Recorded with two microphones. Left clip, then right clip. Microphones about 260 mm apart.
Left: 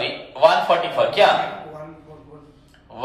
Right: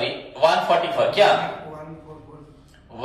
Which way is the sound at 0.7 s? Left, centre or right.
Centre.